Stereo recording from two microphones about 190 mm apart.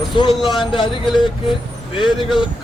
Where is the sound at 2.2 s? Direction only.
Centre (ahead or behind).